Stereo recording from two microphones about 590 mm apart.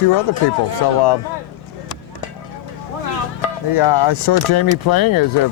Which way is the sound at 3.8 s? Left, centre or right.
Left.